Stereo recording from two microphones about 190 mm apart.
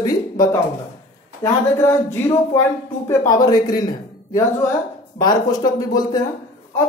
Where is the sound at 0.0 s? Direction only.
20° left (ahead or behind).